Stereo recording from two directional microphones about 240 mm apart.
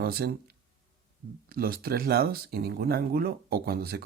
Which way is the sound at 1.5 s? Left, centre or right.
Right.